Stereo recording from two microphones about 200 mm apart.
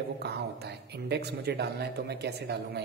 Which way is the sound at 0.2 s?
55° right (ahead or behind).